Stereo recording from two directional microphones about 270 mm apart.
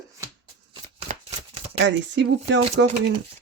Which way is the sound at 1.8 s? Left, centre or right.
Right.